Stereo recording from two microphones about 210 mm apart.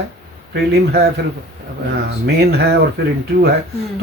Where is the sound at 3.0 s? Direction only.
50° right (ahead or behind).